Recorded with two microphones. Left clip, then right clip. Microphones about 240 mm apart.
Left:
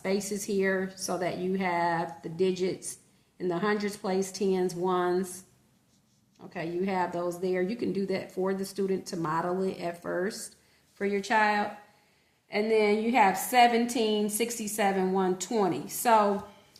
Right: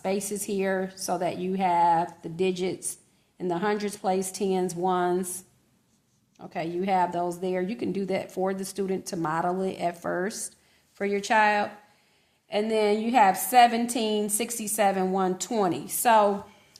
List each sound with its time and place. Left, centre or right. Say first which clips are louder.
0.0 s a woman's voice: right 2 dB; right
6.4 s a woman's voice: right 3 dB; right